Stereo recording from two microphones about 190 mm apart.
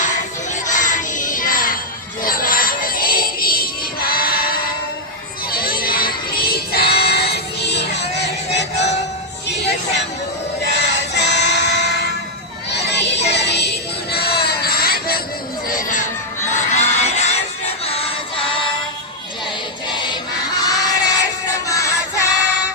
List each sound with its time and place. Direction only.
0.7 s music: 40° left (ahead or behind)
4.1 s choir: 50° left (ahead or behind)
5.5 s child singing: 50° left (ahead or behind)
9.5 s music: 65° left (ahead or behind)
12.7 s child singing: 65° left (ahead or behind)
15.7 s music: 45° left (ahead or behind)
16.5 s crowd: 35° left (ahead or behind)
17.8 s music: 30° left (ahead or behind)
19.9 s choir: 25° left (ahead or behind)
20.7 s crowd: 20° left (ahead or behind)
21.7 s music: 15° left (ahead or behind)